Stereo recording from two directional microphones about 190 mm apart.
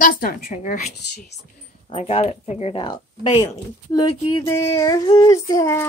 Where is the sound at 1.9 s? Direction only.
35° left (ahead or behind).